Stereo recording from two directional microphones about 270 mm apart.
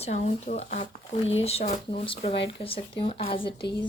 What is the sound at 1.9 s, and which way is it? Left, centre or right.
Speech, centre.